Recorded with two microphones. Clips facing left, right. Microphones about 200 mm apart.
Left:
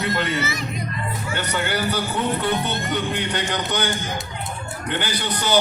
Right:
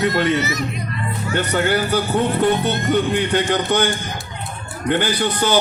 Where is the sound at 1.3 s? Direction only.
50° right (ahead or behind).